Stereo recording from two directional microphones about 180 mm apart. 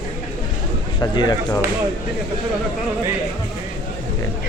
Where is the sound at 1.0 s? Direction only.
25° left (ahead or behind).